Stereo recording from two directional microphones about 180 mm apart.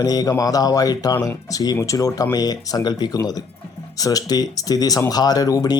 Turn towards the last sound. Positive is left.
turn(degrees=20)  # may be behind; listen again after turning